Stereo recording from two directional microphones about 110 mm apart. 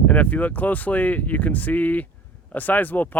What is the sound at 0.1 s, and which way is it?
Speech, 15° left (ahead or behind).